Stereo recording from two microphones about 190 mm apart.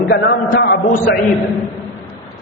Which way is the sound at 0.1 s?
60° left (ahead or behind).